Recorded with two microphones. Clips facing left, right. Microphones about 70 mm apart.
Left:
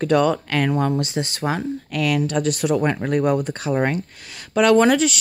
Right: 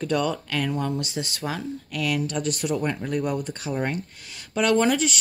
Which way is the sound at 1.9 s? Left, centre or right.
Left.